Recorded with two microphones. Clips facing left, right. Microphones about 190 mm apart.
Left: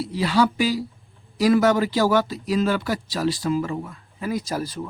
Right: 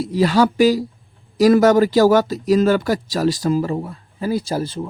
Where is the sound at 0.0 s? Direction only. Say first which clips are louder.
Right 5 dB; 45° right (ahead or behind).